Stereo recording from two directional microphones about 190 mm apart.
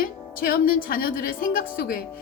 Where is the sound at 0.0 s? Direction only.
50° left (ahead or behind).